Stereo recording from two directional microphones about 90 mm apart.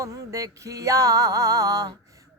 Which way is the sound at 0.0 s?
40° right (ahead or behind).